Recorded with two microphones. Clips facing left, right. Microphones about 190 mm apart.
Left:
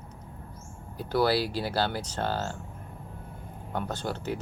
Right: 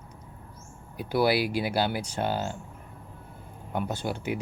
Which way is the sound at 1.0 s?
10° right (ahead or behind).